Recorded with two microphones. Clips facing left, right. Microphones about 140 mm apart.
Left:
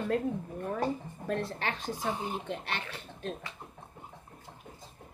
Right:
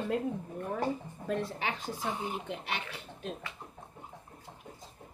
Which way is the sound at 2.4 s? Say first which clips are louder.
Left 1 dB; 10° right (ahead or behind).